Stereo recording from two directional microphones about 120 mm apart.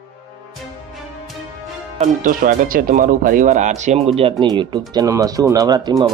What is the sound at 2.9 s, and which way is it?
Speech, 90° right.